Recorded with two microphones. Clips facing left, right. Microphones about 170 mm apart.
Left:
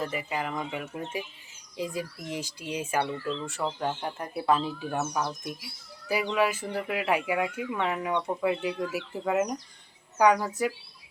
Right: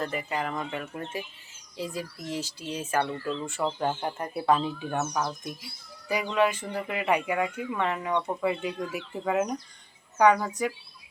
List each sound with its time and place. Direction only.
0.0 s speech: 5° left (ahead or behind)
3.2 s speech: 5° right (ahead or behind)